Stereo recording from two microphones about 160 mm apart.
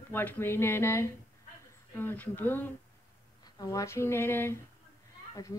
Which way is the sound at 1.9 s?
10° left (ahead or behind).